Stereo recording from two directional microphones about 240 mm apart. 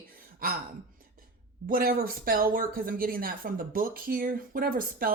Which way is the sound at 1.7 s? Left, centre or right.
Right.